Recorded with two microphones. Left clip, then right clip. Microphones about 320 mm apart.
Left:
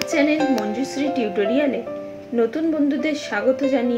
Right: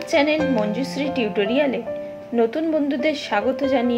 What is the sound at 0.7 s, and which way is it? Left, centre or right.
Speech, centre.